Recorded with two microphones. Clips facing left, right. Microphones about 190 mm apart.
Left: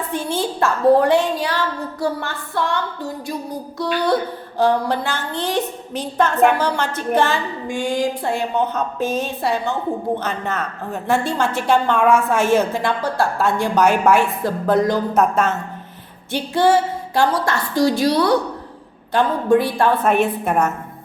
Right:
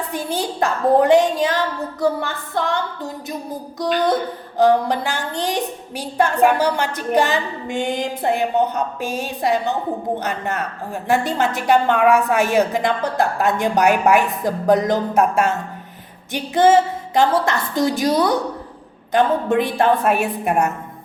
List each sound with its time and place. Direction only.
0.1 s a woman's voice: 15° right (ahead or behind)
4.0 s a woman's voice: 20° right (ahead or behind)
19.1 s a woman's voice: 20° right (ahead or behind)